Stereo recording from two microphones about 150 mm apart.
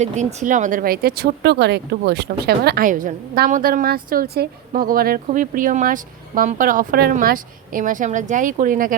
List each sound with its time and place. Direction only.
0.0 s speech: 50° right (ahead or behind)